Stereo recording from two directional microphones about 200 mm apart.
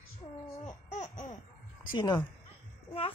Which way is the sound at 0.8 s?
35° left (ahead or behind).